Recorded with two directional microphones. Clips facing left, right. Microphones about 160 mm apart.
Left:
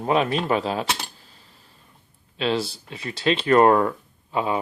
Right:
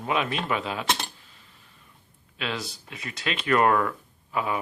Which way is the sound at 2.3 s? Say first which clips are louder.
Left 9 dB; 30° left (ahead or behind).